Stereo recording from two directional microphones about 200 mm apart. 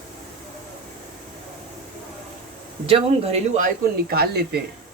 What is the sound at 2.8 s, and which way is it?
Speech, 30° right (ahead or behind).